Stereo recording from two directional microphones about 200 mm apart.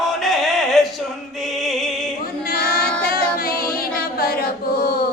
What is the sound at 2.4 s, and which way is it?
Female singing, 45° left (ahead or behind).